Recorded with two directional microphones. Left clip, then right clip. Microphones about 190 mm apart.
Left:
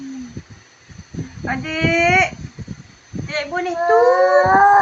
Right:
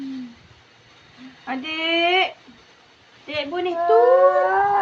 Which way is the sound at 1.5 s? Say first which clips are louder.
Left 4 dB; 25° left (ahead or behind).